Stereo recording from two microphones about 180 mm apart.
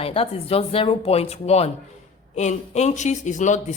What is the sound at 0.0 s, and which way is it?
Speech, 30° left (ahead or behind).